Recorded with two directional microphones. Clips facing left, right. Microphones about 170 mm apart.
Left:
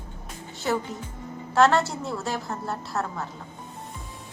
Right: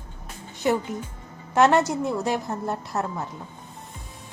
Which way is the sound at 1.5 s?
20° right (ahead or behind).